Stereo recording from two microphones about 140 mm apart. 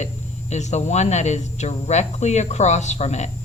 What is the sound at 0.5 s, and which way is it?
Speech, 55° left (ahead or behind).